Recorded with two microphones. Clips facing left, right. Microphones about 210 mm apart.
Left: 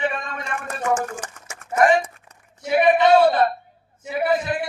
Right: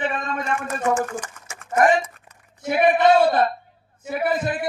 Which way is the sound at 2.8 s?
50° right (ahead or behind).